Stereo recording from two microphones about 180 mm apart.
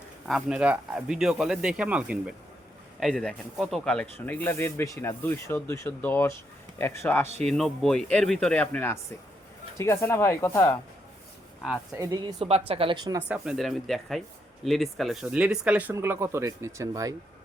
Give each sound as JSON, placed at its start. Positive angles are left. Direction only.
{"t": 0.3, "sound": "speech", "side_deg": -5}
{"t": 7.4, "sound": "speech", "side_deg": 0}
{"t": 11.9, "sound": "speech", "side_deg": -20}
{"t": 12.4, "sound": "speech", "side_deg": -35}
{"t": 13.1, "sound": "speech", "side_deg": -5}